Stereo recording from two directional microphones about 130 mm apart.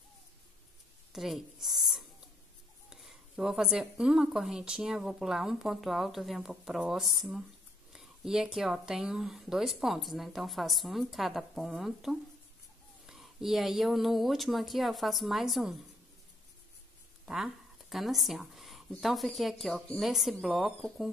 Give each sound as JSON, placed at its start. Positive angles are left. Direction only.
{"t": 1.1, "sound": "speech", "side_deg": 0}
{"t": 17.3, "sound": "speech", "side_deg": 0}